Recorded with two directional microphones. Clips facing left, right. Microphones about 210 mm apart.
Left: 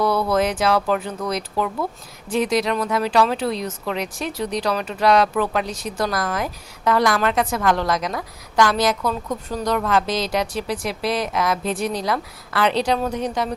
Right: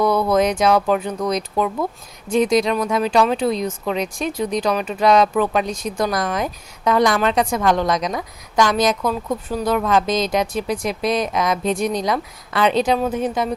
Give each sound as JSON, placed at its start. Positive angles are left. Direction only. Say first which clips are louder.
{"t": 0.0, "sound": "a woman's voice", "louder": "right 3 dB", "side_deg": -15}